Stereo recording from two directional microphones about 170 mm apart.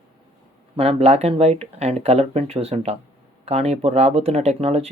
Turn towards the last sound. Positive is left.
turn(degrees=-35)  # may be behind; listen again after turning